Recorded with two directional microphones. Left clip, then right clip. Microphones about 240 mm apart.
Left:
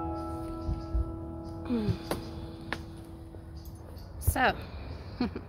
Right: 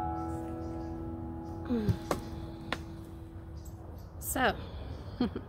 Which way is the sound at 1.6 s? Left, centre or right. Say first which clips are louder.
Left 1 dB; centre.